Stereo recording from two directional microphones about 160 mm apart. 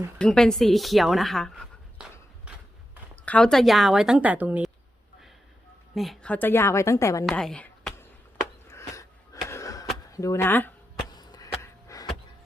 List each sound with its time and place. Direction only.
0.2 s a woman's voice: 5° left (ahead or behind)
5.9 s a woman's voice: centre (ahead or behind); by 7.3 s 20° left (ahead or behind)
7.3 s a woman's voice: 5° left (ahead or behind)
8.7 s a sound: 20° left (ahead or behind)
11.2 s chop: 25° left (ahead or behind)
11.6 s a sound: 20° left (ahead or behind)